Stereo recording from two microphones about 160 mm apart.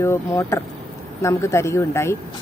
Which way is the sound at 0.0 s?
15° left (ahead or behind).